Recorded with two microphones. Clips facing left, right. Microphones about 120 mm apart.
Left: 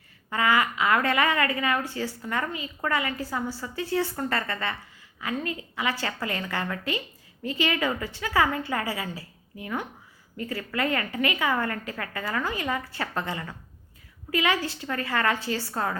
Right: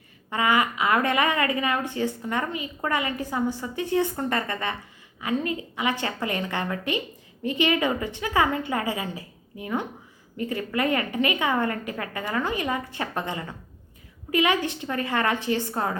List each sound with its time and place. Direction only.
0.3 s a woman's voice: 20° right (ahead or behind)